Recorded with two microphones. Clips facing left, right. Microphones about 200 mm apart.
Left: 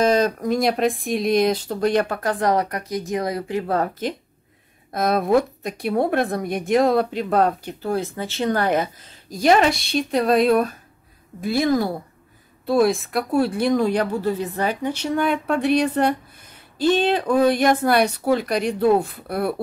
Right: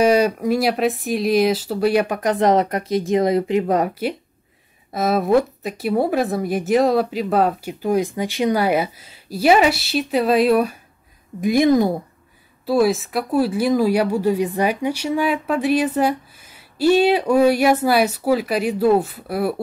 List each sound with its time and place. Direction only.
0.0 s speech: 10° right (ahead or behind)
4.9 s speech: centre (ahead or behind)
11.4 s speech: 15° right (ahead or behind)
12.6 s speech: 5° right (ahead or behind)